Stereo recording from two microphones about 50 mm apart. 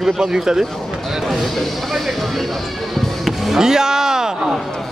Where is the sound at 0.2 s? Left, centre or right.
Centre.